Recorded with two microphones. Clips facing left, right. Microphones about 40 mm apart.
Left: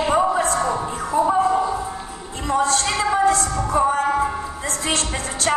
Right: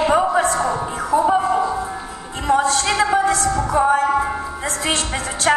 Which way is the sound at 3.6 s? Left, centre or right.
Right.